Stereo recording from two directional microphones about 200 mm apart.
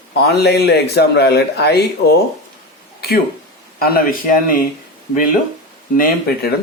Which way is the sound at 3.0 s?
50° left (ahead or behind).